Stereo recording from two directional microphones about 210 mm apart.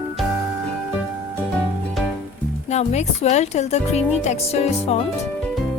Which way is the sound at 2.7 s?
35° left (ahead or behind).